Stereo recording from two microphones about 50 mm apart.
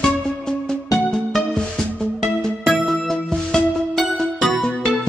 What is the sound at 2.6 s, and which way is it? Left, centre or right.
Music, centre.